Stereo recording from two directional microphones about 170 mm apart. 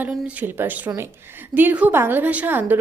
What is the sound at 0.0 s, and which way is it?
A woman's voice, 10° right (ahead or behind).